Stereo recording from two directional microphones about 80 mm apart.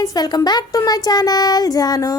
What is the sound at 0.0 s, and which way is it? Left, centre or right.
A woman's voice, left.